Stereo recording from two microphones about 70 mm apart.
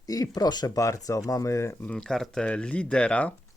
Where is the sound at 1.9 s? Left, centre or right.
Centre.